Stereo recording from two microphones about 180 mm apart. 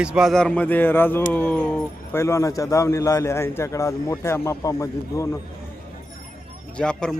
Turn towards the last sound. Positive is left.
turn(degrees=5)  # may be behind; listen again after turning